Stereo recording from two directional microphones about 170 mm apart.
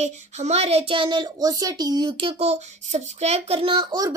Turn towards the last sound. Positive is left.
turn(degrees=-25)  # may be behind; listen again after turning